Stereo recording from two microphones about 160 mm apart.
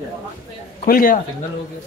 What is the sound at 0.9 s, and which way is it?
Speech, 60° left (ahead or behind).